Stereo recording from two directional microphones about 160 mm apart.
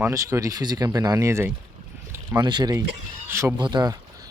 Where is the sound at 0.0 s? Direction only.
20° right (ahead or behind).